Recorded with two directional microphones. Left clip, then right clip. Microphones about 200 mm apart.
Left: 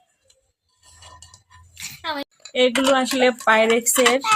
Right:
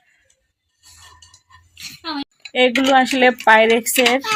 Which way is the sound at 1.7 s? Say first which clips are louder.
Even; 45° left (ahead or behind).